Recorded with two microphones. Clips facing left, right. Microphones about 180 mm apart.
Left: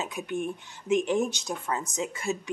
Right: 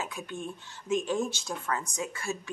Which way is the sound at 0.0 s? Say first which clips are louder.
Left 5 dB; 20° left (ahead or behind).